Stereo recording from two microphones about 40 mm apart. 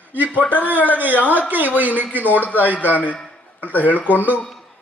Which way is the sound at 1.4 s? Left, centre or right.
Right.